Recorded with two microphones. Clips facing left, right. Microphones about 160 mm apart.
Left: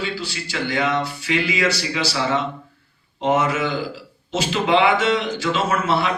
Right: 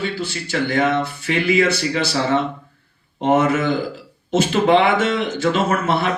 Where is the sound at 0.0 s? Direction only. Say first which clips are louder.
Right 3 dB; 50° right (ahead or behind).